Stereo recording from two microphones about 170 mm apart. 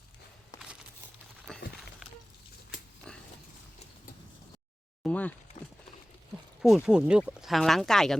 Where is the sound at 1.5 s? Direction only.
5° left (ahead or behind).